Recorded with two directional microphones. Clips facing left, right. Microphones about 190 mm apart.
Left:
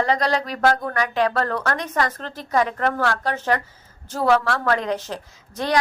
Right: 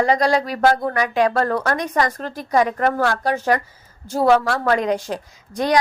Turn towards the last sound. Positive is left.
turn(degrees=-15)  # may be behind; listen again after turning